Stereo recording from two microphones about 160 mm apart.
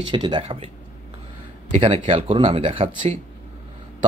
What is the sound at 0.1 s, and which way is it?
Speech, 30° right (ahead or behind).